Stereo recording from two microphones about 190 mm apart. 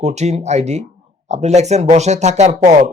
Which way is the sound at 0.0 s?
35° right (ahead or behind).